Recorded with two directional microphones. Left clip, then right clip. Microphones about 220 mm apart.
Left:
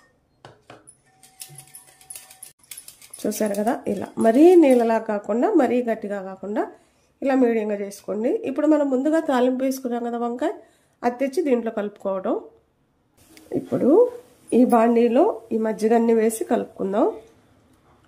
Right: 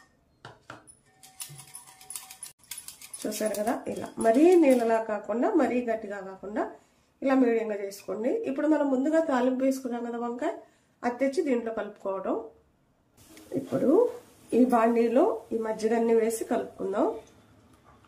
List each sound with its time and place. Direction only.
3.3 s speech: 50° left (ahead or behind)
14.5 s speech: 45° left (ahead or behind)